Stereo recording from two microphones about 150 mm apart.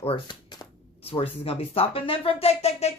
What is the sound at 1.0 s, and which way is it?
Speech, 40° left (ahead or behind).